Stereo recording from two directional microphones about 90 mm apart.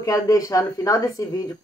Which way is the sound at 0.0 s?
40° left (ahead or behind).